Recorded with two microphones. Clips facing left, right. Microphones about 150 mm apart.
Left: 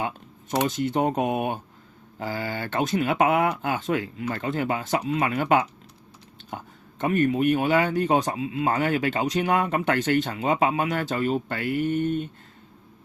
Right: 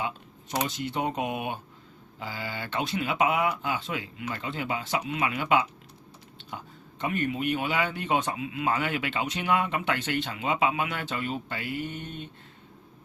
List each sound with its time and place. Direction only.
0.7 s speech: 50° left (ahead or behind)
6.5 s a sound: 50° left (ahead or behind)
7.0 s speech: 45° left (ahead or behind)